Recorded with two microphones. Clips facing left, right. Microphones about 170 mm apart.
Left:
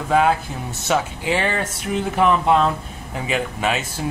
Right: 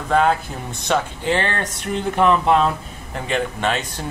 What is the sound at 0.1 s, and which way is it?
Speech, 5° left (ahead or behind).